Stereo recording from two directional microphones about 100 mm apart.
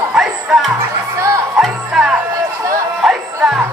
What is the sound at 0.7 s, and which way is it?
Music, 35° right (ahead or behind).